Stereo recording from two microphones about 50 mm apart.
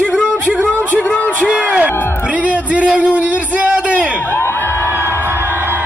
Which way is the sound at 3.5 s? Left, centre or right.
Right.